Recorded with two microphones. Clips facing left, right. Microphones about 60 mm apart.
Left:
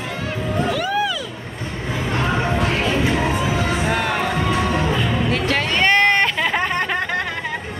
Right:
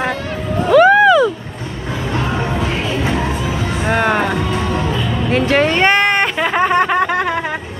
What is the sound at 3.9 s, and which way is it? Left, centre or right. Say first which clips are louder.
Music: right 5 dB; right.